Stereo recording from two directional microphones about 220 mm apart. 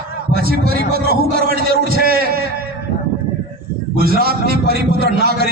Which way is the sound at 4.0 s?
40° right (ahead or behind).